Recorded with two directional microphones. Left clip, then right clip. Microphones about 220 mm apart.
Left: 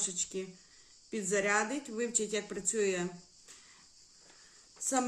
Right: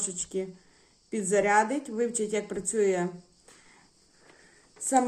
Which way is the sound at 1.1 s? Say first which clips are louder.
Right 7 dB; 15° left (ahead or behind).